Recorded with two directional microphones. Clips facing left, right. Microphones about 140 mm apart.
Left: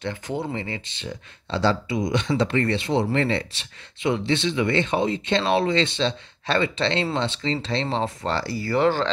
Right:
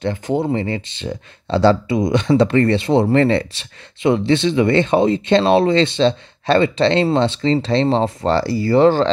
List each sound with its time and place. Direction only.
0.0 s speech: 35° right (ahead or behind)